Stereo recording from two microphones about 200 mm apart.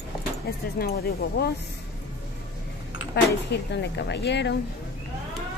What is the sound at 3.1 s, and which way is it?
Speech, 60° left (ahead or behind).